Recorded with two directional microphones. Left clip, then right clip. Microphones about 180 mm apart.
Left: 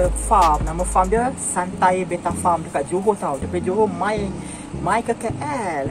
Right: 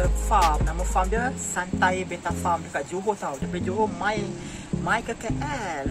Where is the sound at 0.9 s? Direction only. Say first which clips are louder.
Left 7 dB; 15° right (ahead or behind).